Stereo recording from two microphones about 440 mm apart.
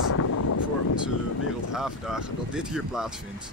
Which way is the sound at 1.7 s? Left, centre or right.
Centre.